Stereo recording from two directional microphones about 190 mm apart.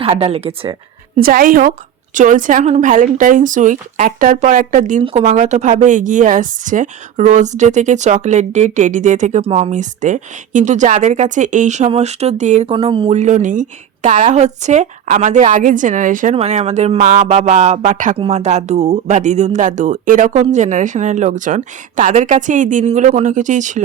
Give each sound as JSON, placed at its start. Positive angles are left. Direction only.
{"t": 0.0, "sound": "a woman's voice", "side_deg": -30}
{"t": 1.2, "sound": "a woman's voice", "side_deg": -50}
{"t": 12.7, "sound": "a woman's voice", "side_deg": -25}